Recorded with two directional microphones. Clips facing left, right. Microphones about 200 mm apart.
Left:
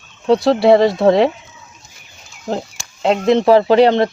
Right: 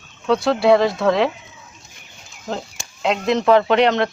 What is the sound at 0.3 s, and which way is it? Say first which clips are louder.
Speech: left 4 dB; 35° left (ahead or behind).